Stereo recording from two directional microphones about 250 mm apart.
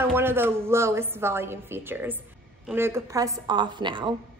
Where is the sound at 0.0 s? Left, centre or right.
Centre.